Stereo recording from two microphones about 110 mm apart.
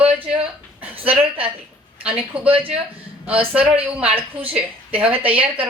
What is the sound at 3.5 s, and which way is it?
Speech, 15° right (ahead or behind).